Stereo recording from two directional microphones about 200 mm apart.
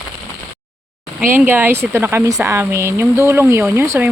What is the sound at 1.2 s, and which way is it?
Speech, 10° right (ahead or behind).